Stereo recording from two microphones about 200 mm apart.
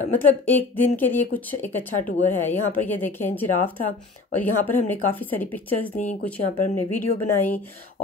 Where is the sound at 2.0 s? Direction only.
40° left (ahead or behind).